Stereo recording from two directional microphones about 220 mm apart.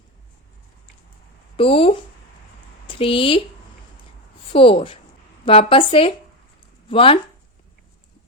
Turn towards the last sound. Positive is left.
turn(degrees=25)  # may be behind; listen again after turning